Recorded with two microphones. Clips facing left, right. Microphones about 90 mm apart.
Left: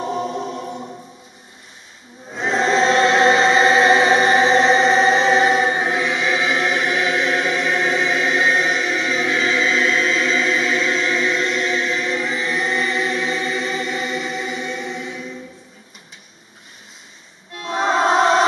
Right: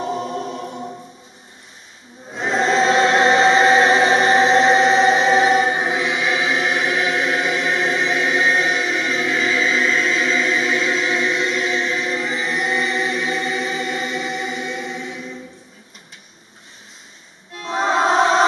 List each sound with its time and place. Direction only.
0.0 s choir: centre (ahead or behind)
2.3 s choir: centre (ahead or behind)
17.6 s music: centre (ahead or behind)